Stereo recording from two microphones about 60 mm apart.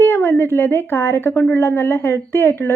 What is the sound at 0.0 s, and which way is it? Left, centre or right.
A woman's voice, left.